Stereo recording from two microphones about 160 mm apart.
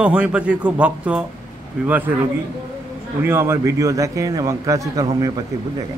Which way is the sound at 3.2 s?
15° right (ahead or behind).